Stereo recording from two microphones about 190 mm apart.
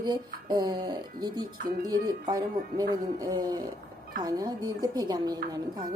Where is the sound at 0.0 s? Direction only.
20° right (ahead or behind).